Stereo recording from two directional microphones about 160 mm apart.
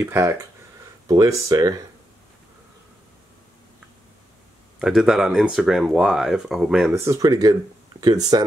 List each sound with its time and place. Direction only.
0.0 s speech: 20° right (ahead or behind)
4.7 s speech: centre (ahead or behind)
6.9 s speech: 15° right (ahead or behind)